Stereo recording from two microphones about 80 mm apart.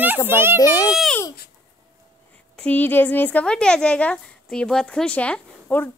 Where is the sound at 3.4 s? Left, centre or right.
Centre.